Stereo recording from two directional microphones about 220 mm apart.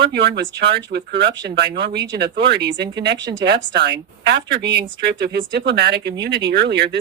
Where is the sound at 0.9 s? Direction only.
40° right (ahead or behind).